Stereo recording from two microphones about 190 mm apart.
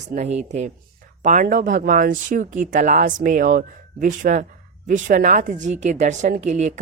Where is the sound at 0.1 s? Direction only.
35° right (ahead or behind).